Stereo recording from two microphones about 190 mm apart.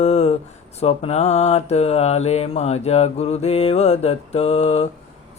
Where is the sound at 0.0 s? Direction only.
35° left (ahead or behind).